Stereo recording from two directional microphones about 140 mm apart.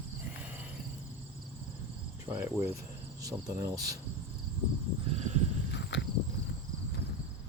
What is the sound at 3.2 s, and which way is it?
Speech, 25° right (ahead or behind).